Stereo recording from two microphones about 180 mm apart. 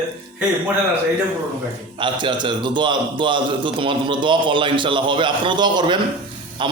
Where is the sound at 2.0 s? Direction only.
25° right (ahead or behind).